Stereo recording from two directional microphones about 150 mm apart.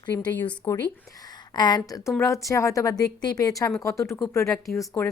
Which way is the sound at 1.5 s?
30° left (ahead or behind).